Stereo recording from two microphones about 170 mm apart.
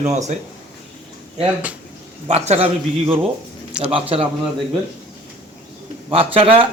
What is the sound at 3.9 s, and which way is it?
Speech, 35° right (ahead or behind).